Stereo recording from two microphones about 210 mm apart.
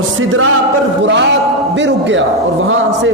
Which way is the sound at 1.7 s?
60° right (ahead or behind).